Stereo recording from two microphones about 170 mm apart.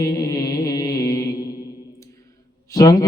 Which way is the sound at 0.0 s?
20° left (ahead or behind).